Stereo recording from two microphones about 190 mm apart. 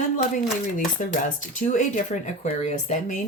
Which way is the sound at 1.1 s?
40° left (ahead or behind).